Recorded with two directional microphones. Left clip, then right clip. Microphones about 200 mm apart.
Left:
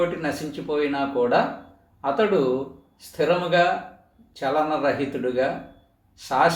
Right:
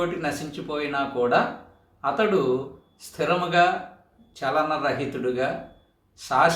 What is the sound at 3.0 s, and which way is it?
A man's voice, 15° right (ahead or behind).